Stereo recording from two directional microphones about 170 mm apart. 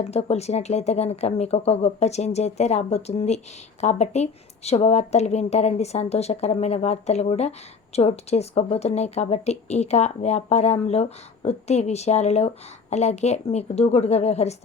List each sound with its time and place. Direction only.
0.0 s speech: 40° left (ahead or behind)